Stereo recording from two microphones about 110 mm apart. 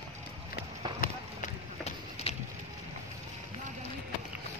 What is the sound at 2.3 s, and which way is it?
Vehicle, 65° left (ahead or behind).